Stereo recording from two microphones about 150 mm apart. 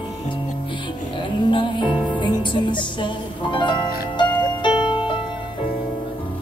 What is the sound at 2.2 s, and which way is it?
Music, 30° left (ahead or behind).